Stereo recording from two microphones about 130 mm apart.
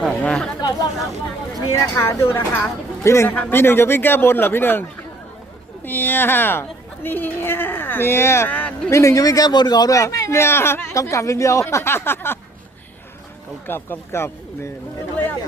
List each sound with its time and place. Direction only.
0.1 s chatter: 10° left (ahead or behind)
1.7 s a woman's voice: 20° left (ahead or behind)
13.7 s a woman's voice: 15° left (ahead or behind)